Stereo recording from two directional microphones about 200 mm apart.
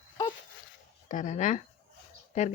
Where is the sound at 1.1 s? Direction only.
40° left (ahead or behind).